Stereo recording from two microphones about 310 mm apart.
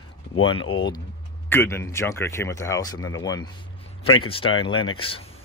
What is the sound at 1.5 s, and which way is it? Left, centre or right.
Speech, centre.